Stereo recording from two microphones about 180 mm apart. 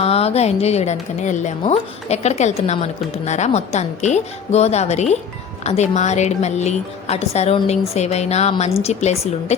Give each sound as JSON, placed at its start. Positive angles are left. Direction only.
{"t": 0.0, "sound": "a woman's voice", "side_deg": 35}